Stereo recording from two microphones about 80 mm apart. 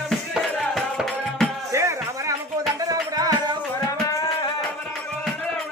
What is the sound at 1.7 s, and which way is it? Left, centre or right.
Music, right.